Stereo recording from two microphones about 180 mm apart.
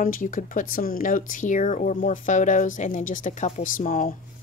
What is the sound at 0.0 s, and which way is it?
A woman's voice, 50° left (ahead or behind).